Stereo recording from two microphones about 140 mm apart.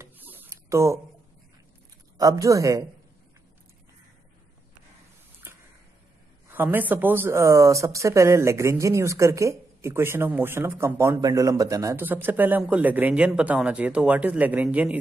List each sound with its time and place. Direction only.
0.0 s a sound: 15° right (ahead or behind)
2.1 s speech: 25° right (ahead or behind)
6.5 s speech: 15° right (ahead or behind)